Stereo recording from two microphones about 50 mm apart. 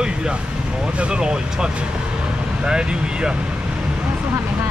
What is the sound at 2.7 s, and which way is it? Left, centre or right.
Speech, centre.